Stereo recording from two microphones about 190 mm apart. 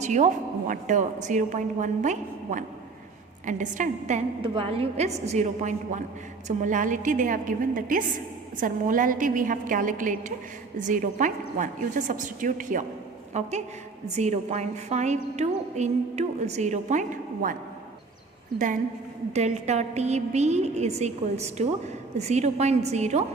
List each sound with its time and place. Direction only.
0.0 s a woman's voice: 40° right (ahead or behind)
4.4 s a woman's voice: 30° right (ahead or behind)
19.3 s a woman's voice: 35° right (ahead or behind)